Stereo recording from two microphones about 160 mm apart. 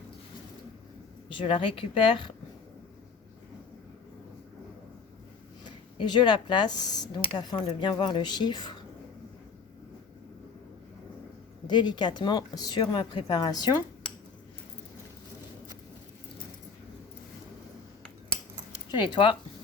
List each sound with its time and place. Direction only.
1.3 s speech: 30° left (ahead or behind)
5.6 s speech: 30° left (ahead or behind)
11.7 s speech: 30° left (ahead or behind)
18.7 s keys jangling: 30° left (ahead or behind)